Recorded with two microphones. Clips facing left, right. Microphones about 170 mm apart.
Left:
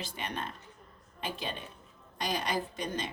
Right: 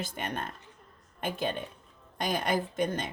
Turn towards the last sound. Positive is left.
turn(degrees=-50)  # may be behind; listen again after turning